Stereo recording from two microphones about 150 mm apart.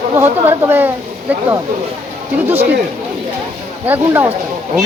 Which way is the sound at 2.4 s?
15° right (ahead or behind).